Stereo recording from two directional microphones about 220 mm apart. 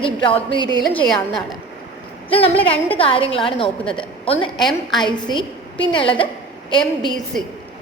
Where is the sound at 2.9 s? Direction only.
25° left (ahead or behind).